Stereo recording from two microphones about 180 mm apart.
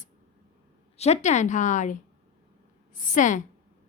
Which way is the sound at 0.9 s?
40° left (ahead or behind).